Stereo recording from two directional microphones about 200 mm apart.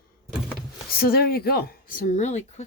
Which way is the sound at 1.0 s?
50° left (ahead or behind).